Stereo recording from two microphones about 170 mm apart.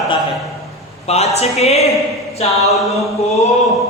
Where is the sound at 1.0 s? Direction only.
40° left (ahead or behind).